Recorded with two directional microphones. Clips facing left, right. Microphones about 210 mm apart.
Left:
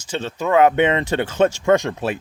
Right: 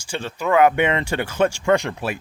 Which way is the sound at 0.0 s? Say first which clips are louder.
Left 2 dB; 20° left (ahead or behind).